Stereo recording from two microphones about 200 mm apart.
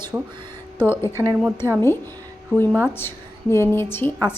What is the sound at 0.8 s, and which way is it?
Speech, 10° left (ahead or behind).